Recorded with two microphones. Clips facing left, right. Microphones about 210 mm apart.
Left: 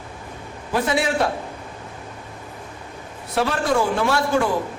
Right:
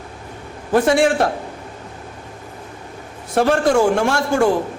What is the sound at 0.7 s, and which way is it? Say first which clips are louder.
Speech: right 6 dB; 50° right (ahead or behind).